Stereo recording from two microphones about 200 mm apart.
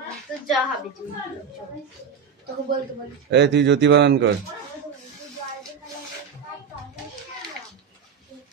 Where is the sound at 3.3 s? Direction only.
60° right (ahead or behind).